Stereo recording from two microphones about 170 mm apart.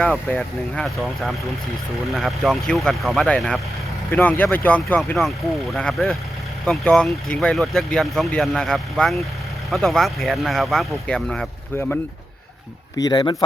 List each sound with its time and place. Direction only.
0.0 s speech: 5° left (ahead or behind)
13.0 s a man's voice: 25° left (ahead or behind)